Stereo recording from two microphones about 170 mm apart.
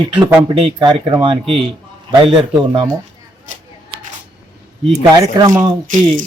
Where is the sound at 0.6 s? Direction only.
25° right (ahead or behind).